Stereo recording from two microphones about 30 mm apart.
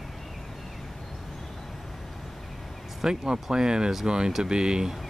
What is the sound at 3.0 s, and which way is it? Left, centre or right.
Speech, right.